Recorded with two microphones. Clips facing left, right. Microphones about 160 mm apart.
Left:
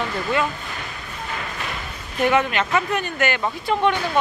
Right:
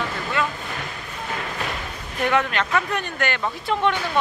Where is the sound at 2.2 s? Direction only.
5° left (ahead or behind).